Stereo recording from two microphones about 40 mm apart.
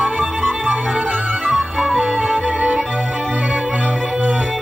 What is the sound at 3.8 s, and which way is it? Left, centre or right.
Music, right.